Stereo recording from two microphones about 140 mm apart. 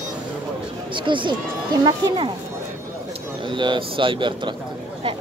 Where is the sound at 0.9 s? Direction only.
35° right (ahead or behind).